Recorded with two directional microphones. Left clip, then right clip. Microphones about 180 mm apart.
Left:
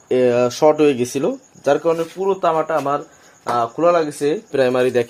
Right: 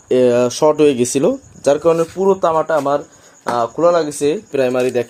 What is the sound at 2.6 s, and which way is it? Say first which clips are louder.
Speech: right 4 dB; 10° right (ahead or behind).